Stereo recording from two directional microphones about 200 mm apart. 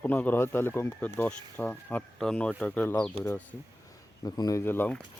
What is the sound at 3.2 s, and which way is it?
Speech, 30° right (ahead or behind).